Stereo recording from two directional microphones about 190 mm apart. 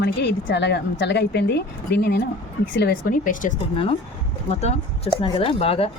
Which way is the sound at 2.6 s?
75° left (ahead or behind).